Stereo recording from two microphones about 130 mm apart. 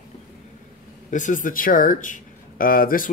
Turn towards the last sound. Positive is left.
turn(degrees=90)